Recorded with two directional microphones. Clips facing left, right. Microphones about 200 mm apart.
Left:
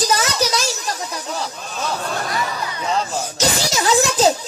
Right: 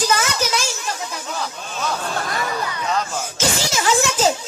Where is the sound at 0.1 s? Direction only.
35° left (ahead or behind).